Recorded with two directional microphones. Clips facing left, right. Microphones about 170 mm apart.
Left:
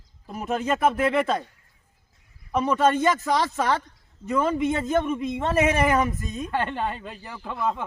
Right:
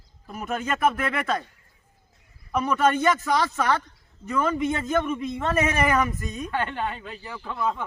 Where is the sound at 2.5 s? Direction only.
25° left (ahead or behind).